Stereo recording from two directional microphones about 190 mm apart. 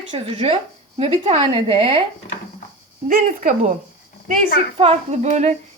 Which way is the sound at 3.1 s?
45° right (ahead or behind).